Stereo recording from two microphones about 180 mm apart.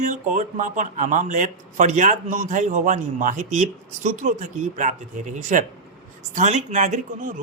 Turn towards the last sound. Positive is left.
turn(degrees=-45)  # may be behind; listen again after turning